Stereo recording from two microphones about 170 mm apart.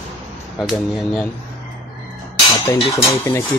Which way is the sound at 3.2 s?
15° left (ahead or behind).